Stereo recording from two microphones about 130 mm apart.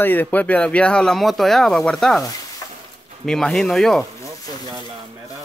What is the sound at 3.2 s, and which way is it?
Speech, 5° left (ahead or behind).